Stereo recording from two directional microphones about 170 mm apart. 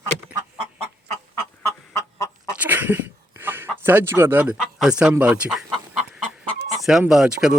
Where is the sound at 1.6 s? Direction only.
15° left (ahead or behind).